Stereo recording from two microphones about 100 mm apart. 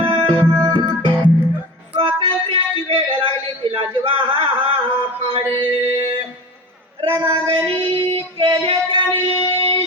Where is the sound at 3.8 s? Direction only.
60° right (ahead or behind).